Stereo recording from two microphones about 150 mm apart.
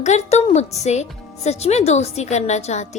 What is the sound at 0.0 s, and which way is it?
A woman's voice, 50° left (ahead or behind).